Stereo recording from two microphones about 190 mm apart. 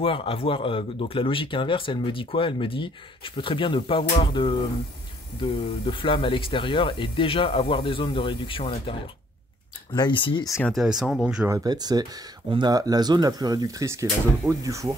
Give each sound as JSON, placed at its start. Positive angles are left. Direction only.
{"t": 0.0, "sound": "speech", "side_deg": 30}
{"t": 10.6, "sound": "speech", "side_deg": 0}
{"t": 11.4, "sound": "speech", "side_deg": -20}